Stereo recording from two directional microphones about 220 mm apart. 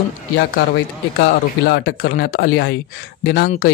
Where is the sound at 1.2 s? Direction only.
45° left (ahead or behind).